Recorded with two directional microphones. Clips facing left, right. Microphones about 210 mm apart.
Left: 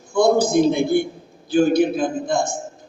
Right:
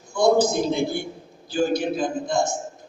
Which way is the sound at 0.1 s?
55° left (ahead or behind).